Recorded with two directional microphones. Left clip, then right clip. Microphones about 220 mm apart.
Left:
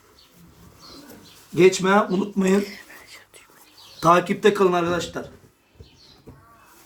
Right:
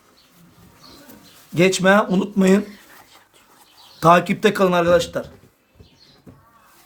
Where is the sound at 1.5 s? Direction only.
55° right (ahead or behind).